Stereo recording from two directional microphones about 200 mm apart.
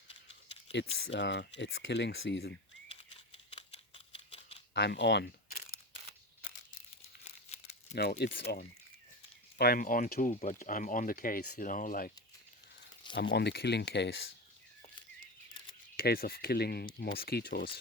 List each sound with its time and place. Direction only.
0.9 s speech: 70° left (ahead or behind)
2.9 s scissors: 30° left (ahead or behind)
4.7 s speech: 60° left (ahead or behind)
7.5 s crumpling: 35° left (ahead or behind)
7.9 s speech: 50° left (ahead or behind)
9.6 s speech: 45° left (ahead or behind)
13.3 s speech: 55° left (ahead or behind)
16.0 s speech: 50° left (ahead or behind)